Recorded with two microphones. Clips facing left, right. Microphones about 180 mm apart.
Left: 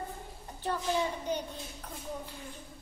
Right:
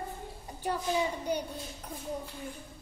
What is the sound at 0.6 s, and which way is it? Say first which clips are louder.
Speech: right 1 dB; 10° right (ahead or behind).